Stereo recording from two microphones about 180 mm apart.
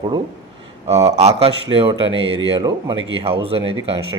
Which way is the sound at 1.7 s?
30° right (ahead or behind).